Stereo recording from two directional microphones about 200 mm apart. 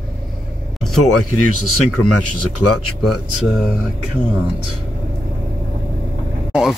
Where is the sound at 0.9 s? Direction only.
90° left.